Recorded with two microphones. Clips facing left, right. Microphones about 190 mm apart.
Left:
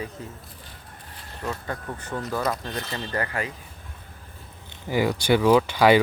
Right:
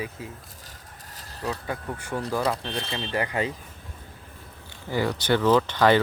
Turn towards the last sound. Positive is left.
turn(degrees=10)  # may be behind; listen again after turning